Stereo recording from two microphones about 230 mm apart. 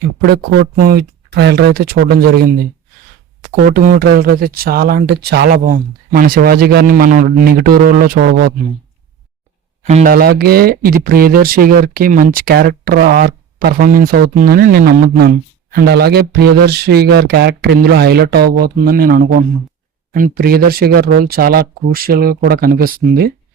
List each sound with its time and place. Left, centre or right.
0.2 s speech: right
3.7 s speech: right
9.8 s speech: right